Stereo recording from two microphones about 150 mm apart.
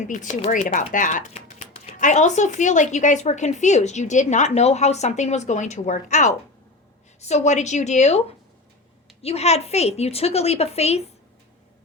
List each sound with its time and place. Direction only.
0.5 s speech: 60° left (ahead or behind)
9.2 s speech: 45° left (ahead or behind)